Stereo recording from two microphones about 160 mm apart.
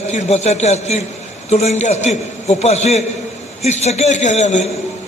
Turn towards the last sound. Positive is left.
turn(degrees=45)  # may be behind; listen again after turning